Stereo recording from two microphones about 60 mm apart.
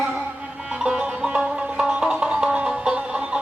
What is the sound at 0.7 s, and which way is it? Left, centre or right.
Music, centre.